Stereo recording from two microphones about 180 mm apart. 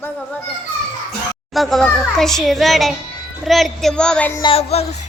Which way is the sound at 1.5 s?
Centre (ahead or behind).